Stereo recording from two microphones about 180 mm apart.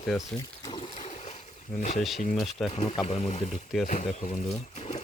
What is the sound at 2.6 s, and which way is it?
Speech, 30° left (ahead or behind).